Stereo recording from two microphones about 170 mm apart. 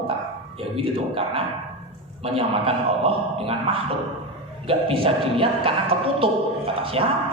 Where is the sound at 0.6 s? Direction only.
30° right (ahead or behind).